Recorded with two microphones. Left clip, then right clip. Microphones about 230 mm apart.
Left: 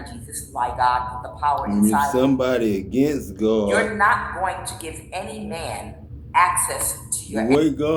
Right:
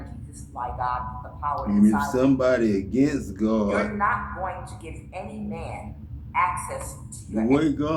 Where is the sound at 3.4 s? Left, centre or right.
Centre.